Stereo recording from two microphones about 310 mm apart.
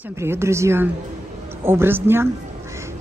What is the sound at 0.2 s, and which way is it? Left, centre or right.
A woman's voice, centre.